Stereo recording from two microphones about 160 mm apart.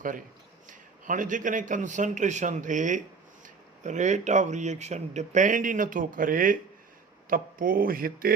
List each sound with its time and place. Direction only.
0.7 s speech: 55° right (ahead or behind)